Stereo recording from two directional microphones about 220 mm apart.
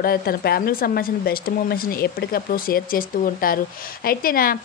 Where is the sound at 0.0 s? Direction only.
45° left (ahead or behind).